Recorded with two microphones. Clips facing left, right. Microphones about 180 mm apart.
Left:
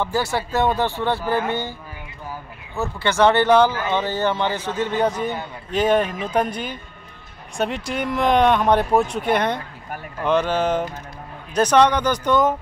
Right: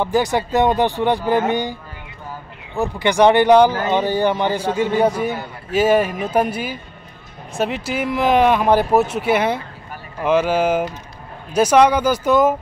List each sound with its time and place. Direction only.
0.0 s a man's voice: 15° right (ahead or behind)